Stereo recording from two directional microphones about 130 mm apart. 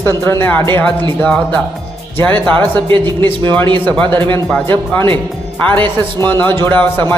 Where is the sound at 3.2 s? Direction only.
15° left (ahead or behind).